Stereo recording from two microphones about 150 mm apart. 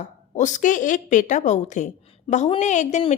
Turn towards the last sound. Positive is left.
turn(degrees=50)  # may be behind; listen again after turning